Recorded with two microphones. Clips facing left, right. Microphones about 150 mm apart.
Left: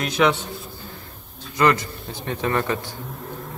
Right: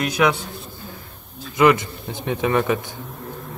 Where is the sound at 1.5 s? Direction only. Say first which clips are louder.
Right 3 dB; 20° right (ahead or behind).